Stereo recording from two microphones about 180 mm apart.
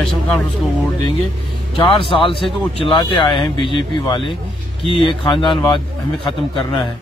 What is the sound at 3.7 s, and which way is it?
Speech, 30° left (ahead or behind).